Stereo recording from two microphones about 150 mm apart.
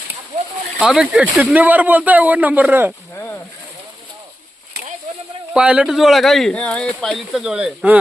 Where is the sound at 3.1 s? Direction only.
15° left (ahead or behind).